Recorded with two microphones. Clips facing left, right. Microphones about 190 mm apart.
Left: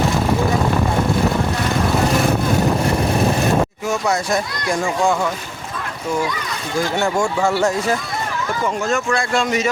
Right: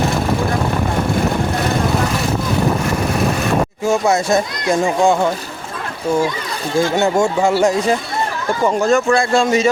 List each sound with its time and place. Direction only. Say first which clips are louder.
3.8 s speech: right 5 dB; 25° right (ahead or behind)
6.7 s speech: right 4 dB; 20° right (ahead or behind)
8.6 s speech: right 7 dB; 35° right (ahead or behind)